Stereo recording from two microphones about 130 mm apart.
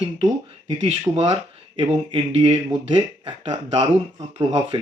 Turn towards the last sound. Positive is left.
turn(degrees=-35)  # may be behind; listen again after turning